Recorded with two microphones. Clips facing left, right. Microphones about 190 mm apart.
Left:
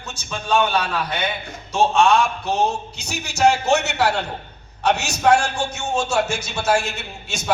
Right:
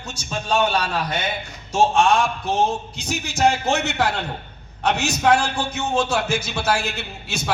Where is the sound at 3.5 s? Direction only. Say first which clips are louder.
Left 3 dB; 55° right (ahead or behind).